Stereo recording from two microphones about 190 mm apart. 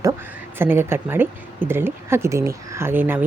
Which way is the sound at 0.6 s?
10° right (ahead or behind).